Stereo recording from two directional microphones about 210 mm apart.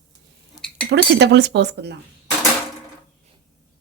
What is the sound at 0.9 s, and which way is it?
Speech, 55° right (ahead or behind).